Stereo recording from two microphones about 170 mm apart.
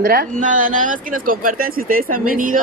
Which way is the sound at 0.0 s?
55° right (ahead or behind).